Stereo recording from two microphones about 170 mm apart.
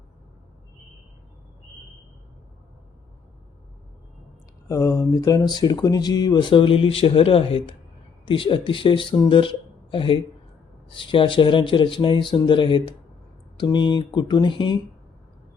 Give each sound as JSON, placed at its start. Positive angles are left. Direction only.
{"t": 4.7, "sound": "speech", "side_deg": 20}